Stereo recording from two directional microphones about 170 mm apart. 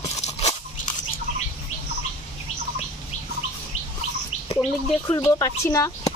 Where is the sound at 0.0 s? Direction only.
40° left (ahead or behind).